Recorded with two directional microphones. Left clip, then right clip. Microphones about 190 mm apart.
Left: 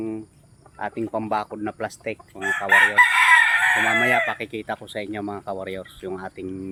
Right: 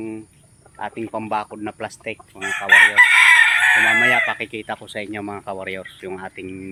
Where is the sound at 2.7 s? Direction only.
30° left (ahead or behind).